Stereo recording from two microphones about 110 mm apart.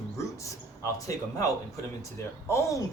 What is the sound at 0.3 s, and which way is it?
Speech, 30° left (ahead or behind).